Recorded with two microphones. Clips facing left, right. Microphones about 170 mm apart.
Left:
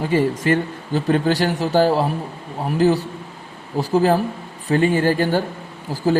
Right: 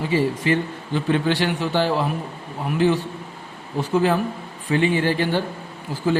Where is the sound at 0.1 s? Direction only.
50° left (ahead or behind).